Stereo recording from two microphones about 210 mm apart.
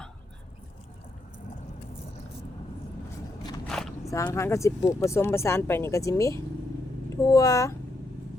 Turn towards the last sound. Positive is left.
turn(degrees=15)  # may be behind; listen again after turning